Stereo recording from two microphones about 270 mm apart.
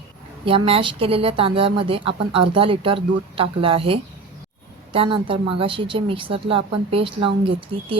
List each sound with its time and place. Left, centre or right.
0.4 s speech: centre